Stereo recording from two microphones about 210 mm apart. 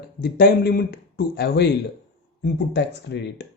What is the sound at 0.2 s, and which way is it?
Speech, 45° left (ahead or behind).